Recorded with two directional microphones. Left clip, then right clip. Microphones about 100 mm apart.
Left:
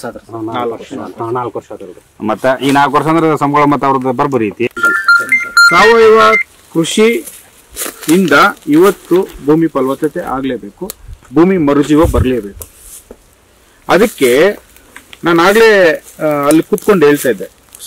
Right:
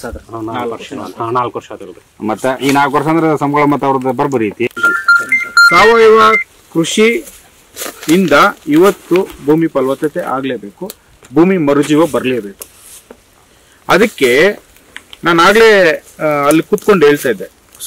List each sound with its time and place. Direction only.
0.3 s speech: 30° right (ahead or behind)
2.1 s speech: 35° left (ahead or behind); by 4.7 s 20° left (ahead or behind)
4.9 s goat: 30° left (ahead or behind)
5.9 s speech: 10° left (ahead or behind)
7.2 s a sound: 35° left (ahead or behind)
8.3 s speech: 5° right (ahead or behind)
13.8 s speech: 5° right (ahead or behind)